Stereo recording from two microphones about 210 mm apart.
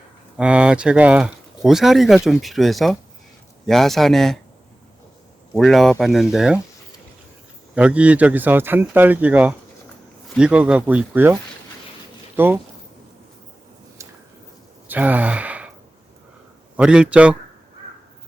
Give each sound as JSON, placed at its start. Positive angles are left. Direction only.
{"t": 0.3, "sound": "speech", "side_deg": -5}
{"t": 5.5, "sound": "speech", "side_deg": 0}
{"t": 7.8, "sound": "speech", "side_deg": -5}
{"t": 12.4, "sound": "speech", "side_deg": -10}
{"t": 14.8, "sound": "sigh", "side_deg": -10}
{"t": 16.7, "sound": "speech", "side_deg": -5}